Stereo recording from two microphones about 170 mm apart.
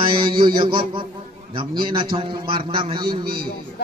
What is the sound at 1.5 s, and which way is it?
A man's voice, 30° right (ahead or behind).